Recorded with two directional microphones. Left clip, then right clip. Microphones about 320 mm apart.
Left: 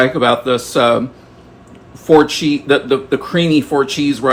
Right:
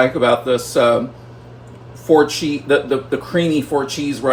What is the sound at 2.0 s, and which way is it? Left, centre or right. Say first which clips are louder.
Speech: left 3 dB; left.